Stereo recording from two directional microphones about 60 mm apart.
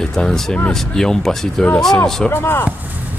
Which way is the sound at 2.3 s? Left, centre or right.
Left.